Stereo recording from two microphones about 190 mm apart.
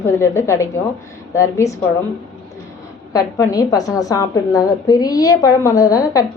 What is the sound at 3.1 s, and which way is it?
A woman's voice, 15° left (ahead or behind).